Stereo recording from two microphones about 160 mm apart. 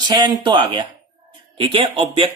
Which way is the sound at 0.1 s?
25° right (ahead or behind).